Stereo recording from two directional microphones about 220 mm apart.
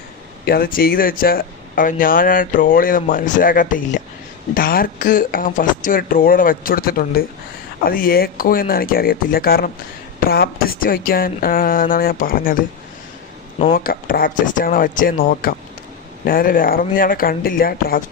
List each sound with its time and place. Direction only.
0.4 s speech: 45° left (ahead or behind)
13.7 s speech: 40° left (ahead or behind)